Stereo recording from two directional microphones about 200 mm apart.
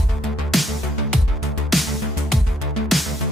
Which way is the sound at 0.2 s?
Centre (ahead or behind).